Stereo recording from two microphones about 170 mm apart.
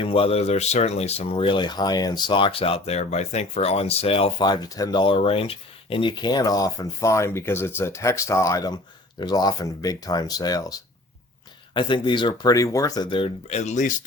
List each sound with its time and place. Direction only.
0.0 s speech: 35° left (ahead or behind)